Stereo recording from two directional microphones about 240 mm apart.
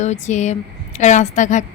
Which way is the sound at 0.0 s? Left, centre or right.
Left.